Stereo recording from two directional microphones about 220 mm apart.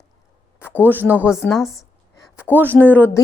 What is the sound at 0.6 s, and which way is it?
Speech, 10° left (ahead or behind).